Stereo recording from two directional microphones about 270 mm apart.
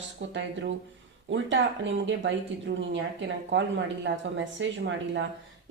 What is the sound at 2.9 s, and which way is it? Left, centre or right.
A woman's voice, right.